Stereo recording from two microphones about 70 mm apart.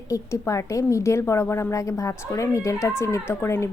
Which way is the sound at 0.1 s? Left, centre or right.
Left.